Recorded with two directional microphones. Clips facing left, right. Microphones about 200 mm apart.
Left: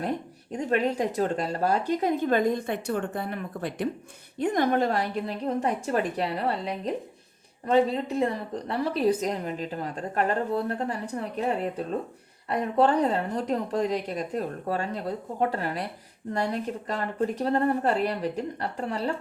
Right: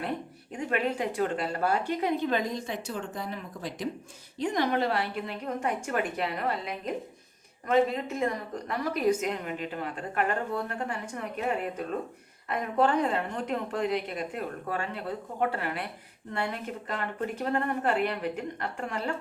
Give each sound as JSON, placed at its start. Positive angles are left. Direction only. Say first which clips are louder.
{"t": 0.5, "sound": "a woman's voice", "louder": "left 4 dB", "side_deg": 40}